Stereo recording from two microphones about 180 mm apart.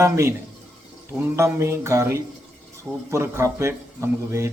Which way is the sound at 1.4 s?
15° right (ahead or behind).